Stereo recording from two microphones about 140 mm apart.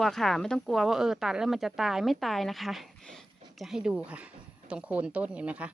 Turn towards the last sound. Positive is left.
turn(degrees=-10)  # may be behind; listen again after turning